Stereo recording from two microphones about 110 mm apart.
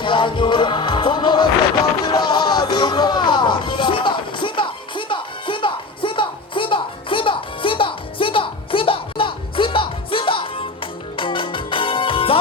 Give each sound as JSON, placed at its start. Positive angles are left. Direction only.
{"t": 0.0, "sound": "music", "side_deg": 50}